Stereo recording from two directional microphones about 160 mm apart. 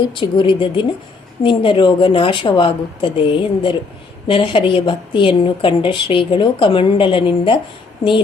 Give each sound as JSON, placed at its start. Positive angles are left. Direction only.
{"t": 0.1, "sound": "a woman's voice", "side_deg": 30}